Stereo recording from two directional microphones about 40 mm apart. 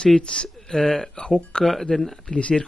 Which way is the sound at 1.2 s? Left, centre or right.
Left.